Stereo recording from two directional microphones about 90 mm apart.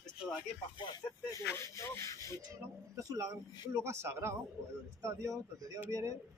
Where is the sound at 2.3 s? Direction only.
40° right (ahead or behind).